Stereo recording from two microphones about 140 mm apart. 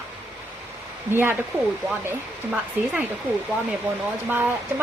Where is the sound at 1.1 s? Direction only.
15° right (ahead or behind).